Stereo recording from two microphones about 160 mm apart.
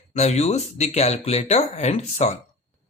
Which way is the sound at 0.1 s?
45° left (ahead or behind).